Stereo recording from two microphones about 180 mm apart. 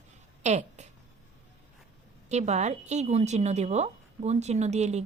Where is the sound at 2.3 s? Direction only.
40° right (ahead or behind).